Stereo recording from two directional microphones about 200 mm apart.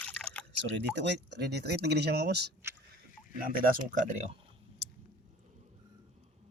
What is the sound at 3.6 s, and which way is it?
Speech, 45° right (ahead or behind).